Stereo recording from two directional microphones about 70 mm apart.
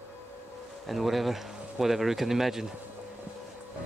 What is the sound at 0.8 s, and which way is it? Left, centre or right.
Speech, centre.